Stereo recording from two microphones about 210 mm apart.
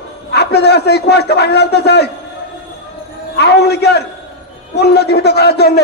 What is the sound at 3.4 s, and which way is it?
A man's voice, 50° left (ahead or behind).